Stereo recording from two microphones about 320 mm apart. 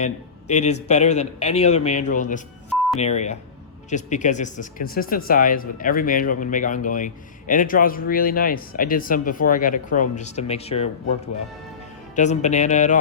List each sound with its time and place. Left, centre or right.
0.0 s speech: left
12.1 s speech: left